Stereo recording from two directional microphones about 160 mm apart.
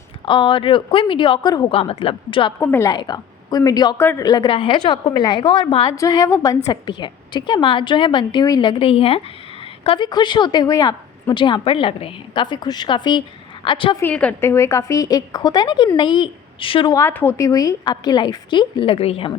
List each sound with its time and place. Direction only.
0.3 s speech: 30° left (ahead or behind)
2.6 s a woman's voice: 15° left (ahead or behind)
2.9 s a woman's voice: 25° left (ahead or behind)
14.0 s a woman's voice: 10° left (ahead or behind); by 16.9 s 35° left (ahead or behind)
16.9 s a woman's voice: 15° left (ahead or behind); by 19.3 s 40° left (ahead or behind)